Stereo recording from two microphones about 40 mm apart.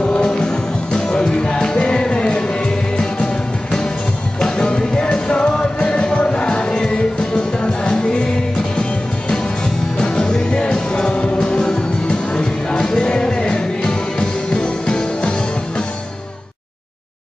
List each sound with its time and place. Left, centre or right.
0.0 s music: left
4.4 s music: left
9.9 s music: centre